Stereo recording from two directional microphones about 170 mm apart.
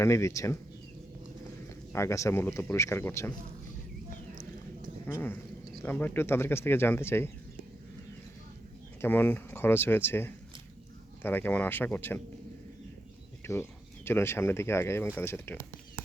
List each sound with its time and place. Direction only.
0.0 s speech: 15° left (ahead or behind)
1.9 s speech: 15° left (ahead or behind)
5.8 s speech: 10° left (ahead or behind)
9.0 s speech: 10° left (ahead or behind)
13.4 s speech: 15° left (ahead or behind)